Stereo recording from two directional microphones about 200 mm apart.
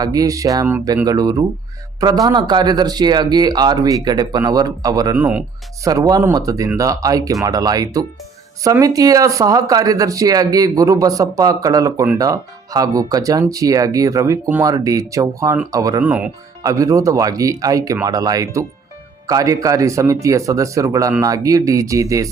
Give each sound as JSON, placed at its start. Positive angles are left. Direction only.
{"t": 0.0, "sound": "speech", "side_deg": -15}
{"t": 5.1, "sound": "speech", "side_deg": -10}